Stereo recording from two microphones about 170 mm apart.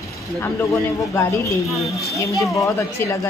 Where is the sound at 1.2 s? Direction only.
15° left (ahead or behind).